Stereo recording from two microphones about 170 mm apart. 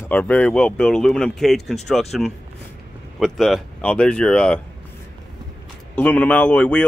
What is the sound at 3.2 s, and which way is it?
Speech, centre (ahead or behind).